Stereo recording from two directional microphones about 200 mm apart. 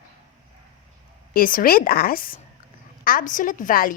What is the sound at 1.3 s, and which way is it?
A woman's voice, 45° left (ahead or behind).